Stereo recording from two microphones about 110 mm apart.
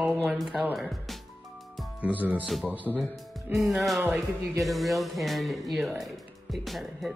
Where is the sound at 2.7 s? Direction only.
15° right (ahead or behind).